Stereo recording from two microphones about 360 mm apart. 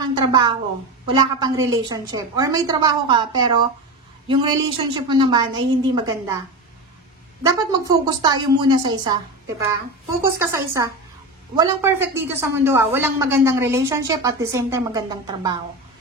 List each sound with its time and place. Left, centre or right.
0.0 s a woman's voice: centre
7.4 s a woman's voice: centre